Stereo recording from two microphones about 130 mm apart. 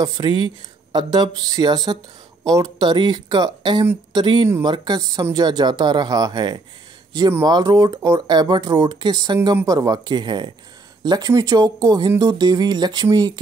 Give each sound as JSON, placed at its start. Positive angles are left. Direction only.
{"t": 0.0, "sound": "speech", "side_deg": -35}